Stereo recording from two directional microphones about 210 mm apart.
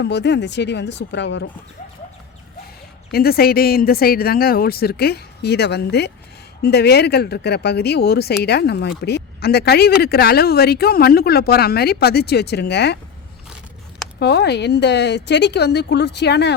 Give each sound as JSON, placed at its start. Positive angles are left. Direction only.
{"t": 0.0, "sound": "speech", "side_deg": 55}
{"t": 3.1, "sound": "speech", "side_deg": 45}
{"t": 14.2, "sound": "speech", "side_deg": 50}